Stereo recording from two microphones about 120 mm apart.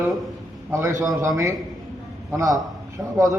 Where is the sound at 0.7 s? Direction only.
25° right (ahead or behind).